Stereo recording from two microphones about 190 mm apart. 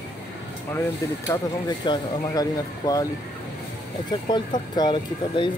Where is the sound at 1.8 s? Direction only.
25° left (ahead or behind).